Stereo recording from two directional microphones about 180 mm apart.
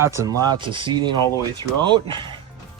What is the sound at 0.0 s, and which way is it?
Speech, 15° right (ahead or behind).